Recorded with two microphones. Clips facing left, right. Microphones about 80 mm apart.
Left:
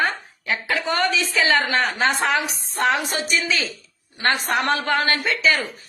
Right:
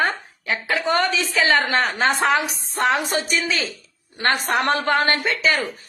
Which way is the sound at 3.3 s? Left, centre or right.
Right.